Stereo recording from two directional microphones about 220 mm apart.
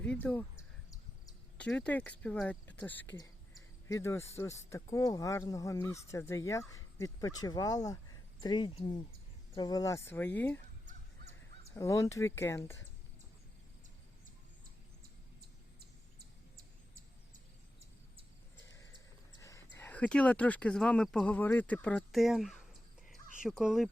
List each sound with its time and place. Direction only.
0.0 s speech: 5° left (ahead or behind)
11.7 s speech: 15° left (ahead or behind)
15.4 s bird: 45° right (ahead or behind)
19.3 s dog: 15° left (ahead or behind)
19.7 s speech: 10° left (ahead or behind)